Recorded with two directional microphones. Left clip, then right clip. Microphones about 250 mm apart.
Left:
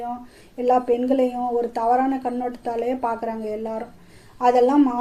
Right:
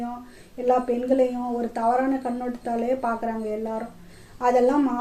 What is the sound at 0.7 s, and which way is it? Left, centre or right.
A woman's voice, left.